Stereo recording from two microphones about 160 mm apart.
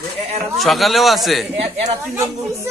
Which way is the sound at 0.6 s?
Centre (ahead or behind).